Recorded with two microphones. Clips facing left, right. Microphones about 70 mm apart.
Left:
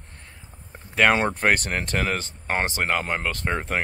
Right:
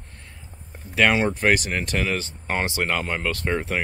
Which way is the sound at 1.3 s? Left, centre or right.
Left.